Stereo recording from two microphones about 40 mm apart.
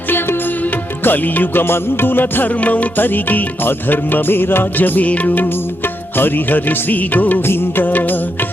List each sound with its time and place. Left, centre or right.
0.1 s music: left
0.6 s music: left
1.6 s music: left
7.4 s music of bollywood: left
7.9 s music: left